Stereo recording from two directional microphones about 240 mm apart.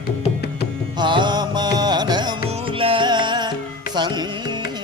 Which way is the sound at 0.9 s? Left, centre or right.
Centre.